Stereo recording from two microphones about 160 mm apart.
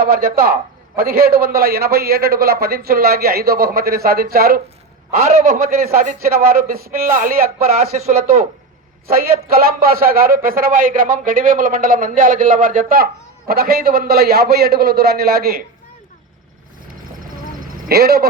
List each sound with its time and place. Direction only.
0.0 s a man's voice: 70° right (ahead or behind)
5.3 s a man's voice: 45° right (ahead or behind)
5.6 s a man's voice: 70° right (ahead or behind)
7.8 s speech: 40° right (ahead or behind)
9.1 s a man's voice: 70° right (ahead or behind)
17.6 s a sound: 70° right (ahead or behind)